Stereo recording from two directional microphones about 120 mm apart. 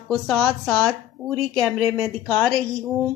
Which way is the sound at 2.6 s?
10° left (ahead or behind).